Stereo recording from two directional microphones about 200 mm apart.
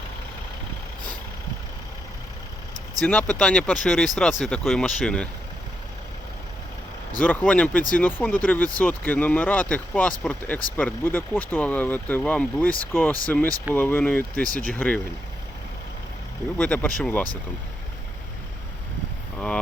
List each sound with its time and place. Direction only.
3.0 s speech: 5° left (ahead or behind)
7.2 s speech: 5° left (ahead or behind)
7.8 s speech: 40° left (ahead or behind)
8.0 s speech: 10° left (ahead or behind)
16.6 s speech: 5° left (ahead or behind)